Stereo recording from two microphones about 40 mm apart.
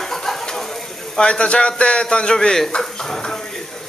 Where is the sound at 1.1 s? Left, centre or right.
Left.